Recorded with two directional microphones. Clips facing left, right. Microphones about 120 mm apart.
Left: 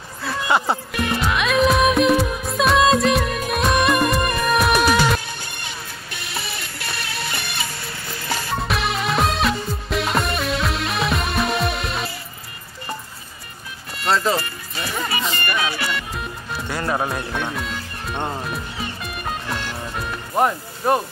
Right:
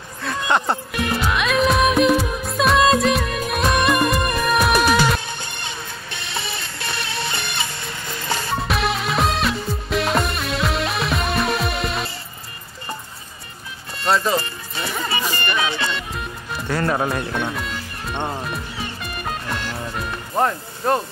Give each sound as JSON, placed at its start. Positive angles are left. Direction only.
{"t": 0.2, "sound": "music", "side_deg": 5}
{"t": 5.4, "sound": "music", "side_deg": -25}
{"t": 8.5, "sound": "music", "side_deg": 0}
{"t": 14.0, "sound": "speech", "side_deg": -20}
{"t": 14.4, "sound": "music", "side_deg": -30}
{"t": 16.8, "sound": "speech", "side_deg": 5}
{"t": 17.3, "sound": "music", "side_deg": 0}
{"t": 20.3, "sound": "speech", "side_deg": 15}